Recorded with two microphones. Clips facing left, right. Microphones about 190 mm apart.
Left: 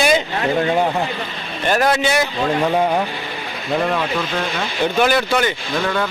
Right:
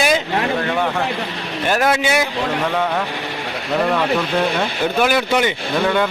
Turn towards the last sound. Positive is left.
turn(degrees=-20)  # may be behind; listen again after turning